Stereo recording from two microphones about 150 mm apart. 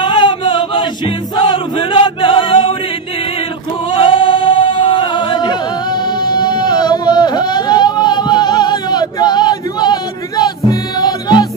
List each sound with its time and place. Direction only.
0.0 s music: 30° left (ahead or behind)
3.9 s singing: 35° left (ahead or behind)
6.2 s a sound: 30° left (ahead or behind)